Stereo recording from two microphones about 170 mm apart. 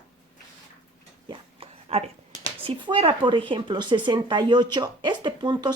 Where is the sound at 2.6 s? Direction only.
30° right (ahead or behind).